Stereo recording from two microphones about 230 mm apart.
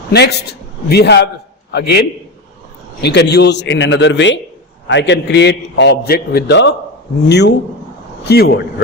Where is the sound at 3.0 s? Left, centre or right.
Left.